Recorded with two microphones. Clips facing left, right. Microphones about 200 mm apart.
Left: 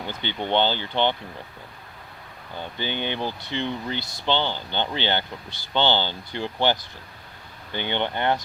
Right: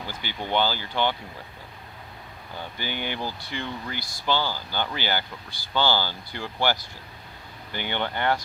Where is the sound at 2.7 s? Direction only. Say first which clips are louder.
Left 4 dB; 20° left (ahead or behind).